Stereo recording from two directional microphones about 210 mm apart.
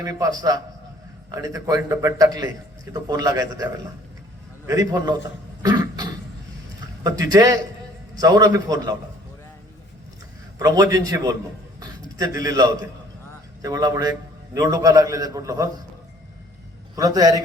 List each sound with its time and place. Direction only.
0.0 s a man's voice: 15° right (ahead or behind)
5.6 s cough: 20° right (ahead or behind)
7.0 s a man's voice: 15° right (ahead or behind)
10.6 s a man's voice: 15° right (ahead or behind)
16.9 s a man's voice: 15° right (ahead or behind)